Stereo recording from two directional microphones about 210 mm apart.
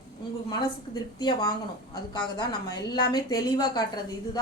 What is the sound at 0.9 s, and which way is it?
A woman's voice, 20° left (ahead or behind).